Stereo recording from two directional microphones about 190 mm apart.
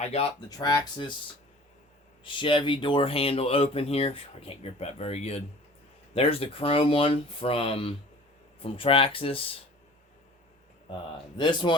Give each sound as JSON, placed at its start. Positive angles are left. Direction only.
{"t": 0.0, "sound": "speech", "side_deg": 35}
{"t": 0.6, "sound": "speech", "side_deg": 25}
{"t": 2.2, "sound": "speech", "side_deg": 25}
{"t": 10.8, "sound": "speech", "side_deg": 25}